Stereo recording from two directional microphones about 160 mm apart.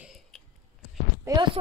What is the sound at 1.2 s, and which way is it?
Speech, 25° right (ahead or behind).